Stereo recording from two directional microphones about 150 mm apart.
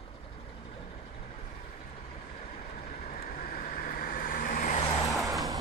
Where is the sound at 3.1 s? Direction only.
70° left (ahead or behind).